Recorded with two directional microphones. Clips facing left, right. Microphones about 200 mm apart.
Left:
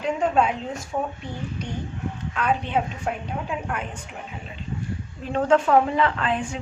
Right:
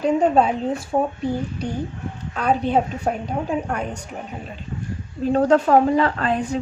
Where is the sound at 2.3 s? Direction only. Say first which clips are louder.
Right 5 dB; 35° right (ahead or behind).